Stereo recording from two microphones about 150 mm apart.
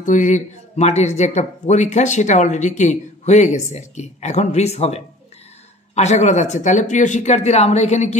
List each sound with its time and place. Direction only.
0.0 s speech: 55° left (ahead or behind)